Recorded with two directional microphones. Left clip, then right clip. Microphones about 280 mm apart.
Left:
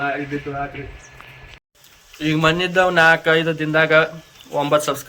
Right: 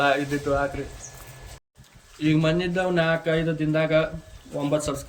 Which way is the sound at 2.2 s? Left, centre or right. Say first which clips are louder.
Left 5 dB; centre.